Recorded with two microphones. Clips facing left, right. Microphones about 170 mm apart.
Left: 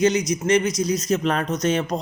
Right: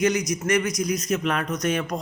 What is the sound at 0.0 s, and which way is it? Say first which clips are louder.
Speech: left 3 dB; 25° left (ahead or behind).